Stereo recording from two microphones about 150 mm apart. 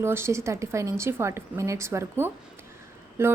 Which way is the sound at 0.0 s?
15° right (ahead or behind).